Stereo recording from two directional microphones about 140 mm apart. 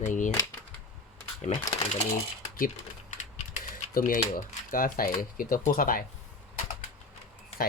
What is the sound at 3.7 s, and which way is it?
Speech, 80° left.